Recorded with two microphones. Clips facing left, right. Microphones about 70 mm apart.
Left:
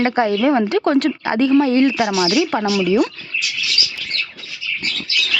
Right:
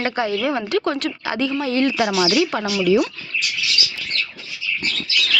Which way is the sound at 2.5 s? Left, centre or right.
Left.